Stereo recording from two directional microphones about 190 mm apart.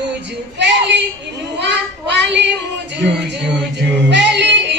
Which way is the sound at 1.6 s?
65° right (ahead or behind).